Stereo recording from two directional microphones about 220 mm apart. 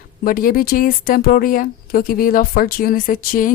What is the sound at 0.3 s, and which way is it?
Speech, 40° left (ahead or behind).